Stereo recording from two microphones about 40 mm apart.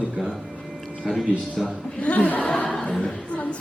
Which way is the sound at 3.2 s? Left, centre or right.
Left.